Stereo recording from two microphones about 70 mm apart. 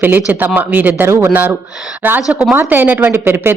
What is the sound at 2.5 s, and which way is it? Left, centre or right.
Speech, right.